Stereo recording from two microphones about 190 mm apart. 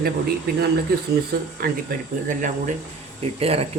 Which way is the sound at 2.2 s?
40° right (ahead or behind).